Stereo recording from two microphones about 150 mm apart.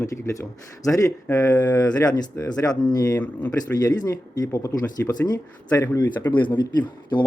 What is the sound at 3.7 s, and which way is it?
Speech, 25° left (ahead or behind).